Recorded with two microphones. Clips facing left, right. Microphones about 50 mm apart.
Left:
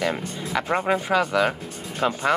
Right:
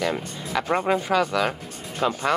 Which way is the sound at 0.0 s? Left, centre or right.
Centre.